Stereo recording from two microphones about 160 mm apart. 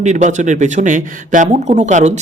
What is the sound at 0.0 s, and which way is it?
Speech, 50° right (ahead or behind).